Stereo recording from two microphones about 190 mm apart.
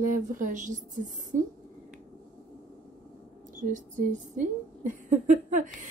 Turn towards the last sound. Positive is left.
turn(degrees=-40)  # may be behind; listen again after turning